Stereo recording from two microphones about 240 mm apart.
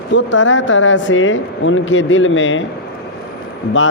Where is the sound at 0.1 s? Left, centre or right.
Left.